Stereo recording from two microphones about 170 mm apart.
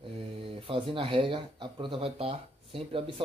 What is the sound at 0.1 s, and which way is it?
A man's voice, 30° right (ahead or behind).